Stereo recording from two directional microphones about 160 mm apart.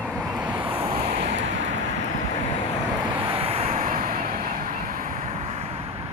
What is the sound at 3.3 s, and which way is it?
Vehicle, 35° right (ahead or behind).